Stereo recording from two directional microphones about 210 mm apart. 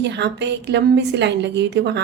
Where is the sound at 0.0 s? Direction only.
55° right (ahead or behind).